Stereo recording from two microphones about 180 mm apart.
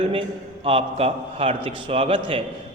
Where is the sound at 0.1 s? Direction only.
30° right (ahead or behind).